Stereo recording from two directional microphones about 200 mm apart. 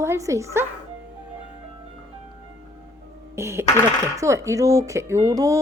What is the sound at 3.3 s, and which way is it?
Speech, 15° right (ahead or behind).